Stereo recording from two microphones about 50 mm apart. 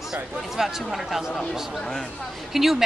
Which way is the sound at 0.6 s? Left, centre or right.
Centre.